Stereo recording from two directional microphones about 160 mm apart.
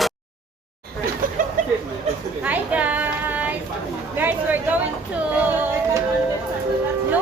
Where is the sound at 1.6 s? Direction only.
55° right (ahead or behind).